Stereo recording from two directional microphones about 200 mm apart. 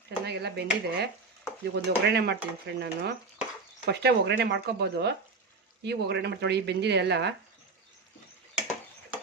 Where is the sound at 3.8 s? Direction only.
55° right (ahead or behind).